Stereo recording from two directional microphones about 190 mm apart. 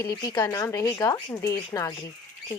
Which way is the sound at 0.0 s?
20° left (ahead or behind).